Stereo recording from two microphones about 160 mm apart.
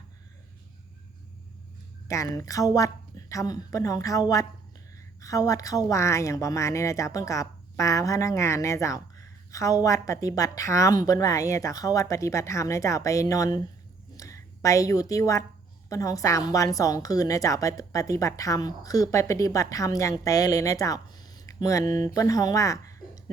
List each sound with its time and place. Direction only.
2.0 s a woman's voice: 20° left (ahead or behind)